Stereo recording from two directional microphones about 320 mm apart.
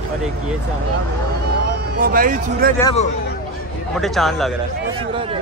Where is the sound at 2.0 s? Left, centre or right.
Right.